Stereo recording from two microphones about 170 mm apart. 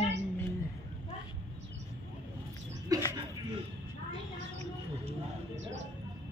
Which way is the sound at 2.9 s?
20° right (ahead or behind).